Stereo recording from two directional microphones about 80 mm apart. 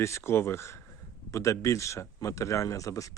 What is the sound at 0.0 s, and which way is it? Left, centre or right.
Speech, left.